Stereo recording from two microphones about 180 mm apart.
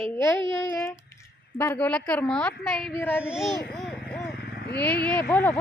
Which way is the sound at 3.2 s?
Centre (ahead or behind).